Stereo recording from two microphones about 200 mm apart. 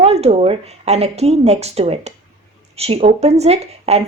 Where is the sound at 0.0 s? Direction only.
30° right (ahead or behind).